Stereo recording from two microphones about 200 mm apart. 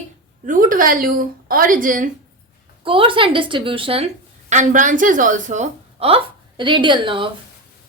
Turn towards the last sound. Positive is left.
turn(degrees=-25)  # may be behind; listen again after turning